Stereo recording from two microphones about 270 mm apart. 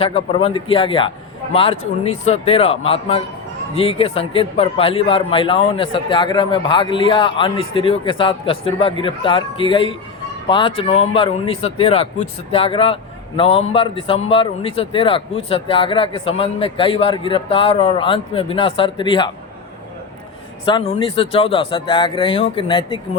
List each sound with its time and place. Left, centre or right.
0.0 s a man's voice: left
20.7 s a man's voice: centre